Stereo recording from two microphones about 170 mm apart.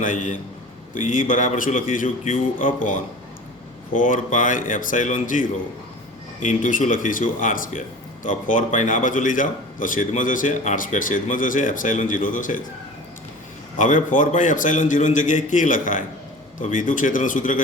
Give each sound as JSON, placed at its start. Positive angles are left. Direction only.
{"t": 0.0, "sound": "speech", "side_deg": 50}
{"t": 3.9, "sound": "speech", "side_deg": 50}
{"t": 13.7, "sound": "speech", "side_deg": 50}